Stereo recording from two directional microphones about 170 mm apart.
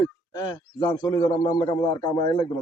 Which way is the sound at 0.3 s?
20° left (ahead or behind).